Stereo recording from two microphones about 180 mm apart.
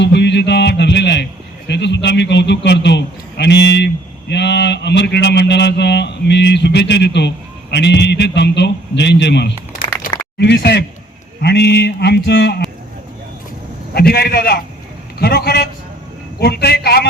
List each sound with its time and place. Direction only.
0.0 s a man's voice: 75° left (ahead or behind)
13.9 s a man's voice: 60° left (ahead or behind)